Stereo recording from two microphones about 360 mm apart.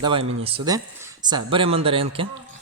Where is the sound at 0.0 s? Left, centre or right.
Centre.